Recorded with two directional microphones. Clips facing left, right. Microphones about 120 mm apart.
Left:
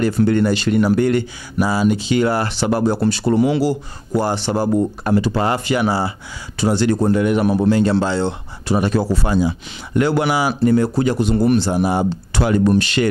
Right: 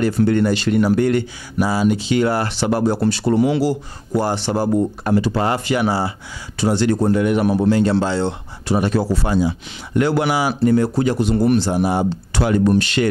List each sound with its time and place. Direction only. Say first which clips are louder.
0.0 s speech: even; 15° left (ahead or behind)
3.4 s speech: left 1 dB; 10° left (ahead or behind)
4.1 s speech: left 1 dB; 20° left (ahead or behind)
11.7 s speech: left 1 dB; 20° left (ahead or behind)